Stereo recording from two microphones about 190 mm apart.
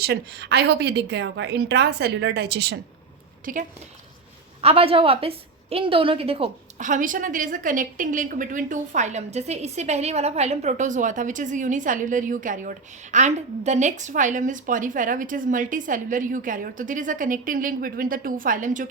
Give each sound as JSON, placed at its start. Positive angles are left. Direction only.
{"t": 0.0, "sound": "a woman's voice", "side_deg": -60}
{"t": 3.4, "sound": "speech", "side_deg": -45}
{"t": 4.6, "sound": "a woman's voice", "side_deg": -30}
{"t": 6.8, "sound": "a woman's voice", "side_deg": -45}